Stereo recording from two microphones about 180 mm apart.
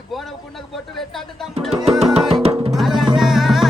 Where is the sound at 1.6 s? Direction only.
Centre (ahead or behind).